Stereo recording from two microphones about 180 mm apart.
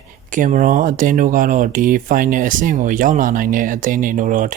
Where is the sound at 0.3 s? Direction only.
45° right (ahead or behind).